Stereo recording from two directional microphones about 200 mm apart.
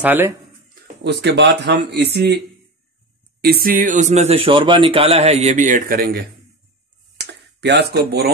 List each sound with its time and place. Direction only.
0.0 s speech: 10° right (ahead or behind)
1.0 s speech: 55° right (ahead or behind)
7.2 s a sound: 55° right (ahead or behind)